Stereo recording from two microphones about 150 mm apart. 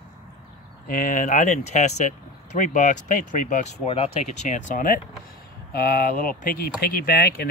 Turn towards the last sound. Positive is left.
turn(degrees=90)